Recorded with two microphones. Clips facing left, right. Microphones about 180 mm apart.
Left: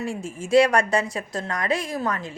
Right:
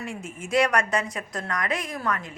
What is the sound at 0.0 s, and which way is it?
A woman's voice, 30° left (ahead or behind).